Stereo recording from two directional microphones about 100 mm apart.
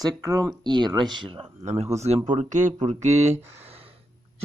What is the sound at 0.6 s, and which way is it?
Speech, 45° right (ahead or behind).